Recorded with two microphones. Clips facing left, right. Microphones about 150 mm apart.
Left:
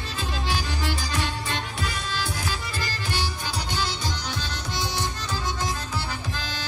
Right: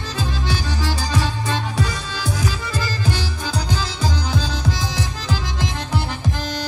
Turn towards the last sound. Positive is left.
turn(degrees=-90)